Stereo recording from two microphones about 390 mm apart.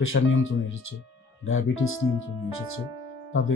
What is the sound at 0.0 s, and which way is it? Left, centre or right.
Speech, left.